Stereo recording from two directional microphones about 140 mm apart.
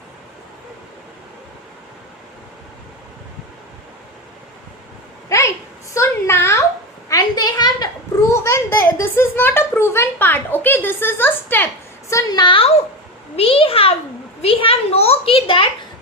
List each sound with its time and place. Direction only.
5.3 s a sound: 20° left (ahead or behind)
8.3 s a child's voice: 20° left (ahead or behind)
12.1 s a woman's voice: 30° left (ahead or behind)